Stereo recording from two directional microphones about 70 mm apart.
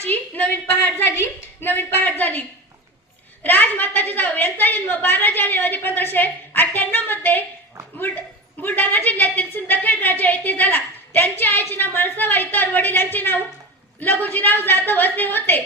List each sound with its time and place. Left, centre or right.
0.1 s a woman's voice: left
3.4 s a woman's voice: left